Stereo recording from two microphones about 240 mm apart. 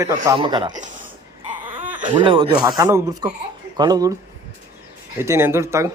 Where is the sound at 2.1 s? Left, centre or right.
Centre.